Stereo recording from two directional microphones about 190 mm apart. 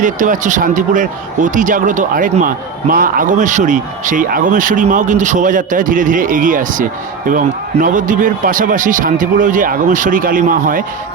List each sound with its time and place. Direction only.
0.0 s a man's voice: 45° right (ahead or behind)